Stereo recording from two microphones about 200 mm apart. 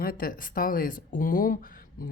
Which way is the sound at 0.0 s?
45° left (ahead or behind).